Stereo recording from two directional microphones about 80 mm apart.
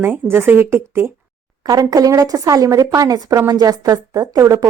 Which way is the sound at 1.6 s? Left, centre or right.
Right.